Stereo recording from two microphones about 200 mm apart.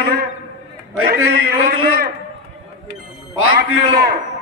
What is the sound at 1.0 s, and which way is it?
Speech, 50° right (ahead or behind).